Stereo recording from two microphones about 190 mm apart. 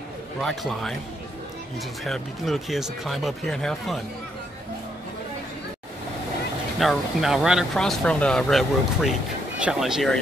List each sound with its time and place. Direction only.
0.4 s speech: centre (ahead or behind)
2.0 s speech: centre (ahead or behind)
6.8 s speech: centre (ahead or behind)